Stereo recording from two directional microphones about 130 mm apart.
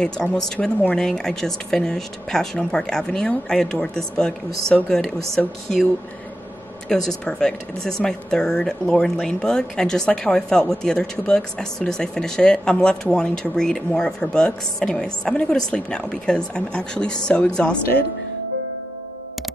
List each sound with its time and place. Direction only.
0.0 s speech: 5° left (ahead or behind)
6.9 s speech: 5° left (ahead or behind)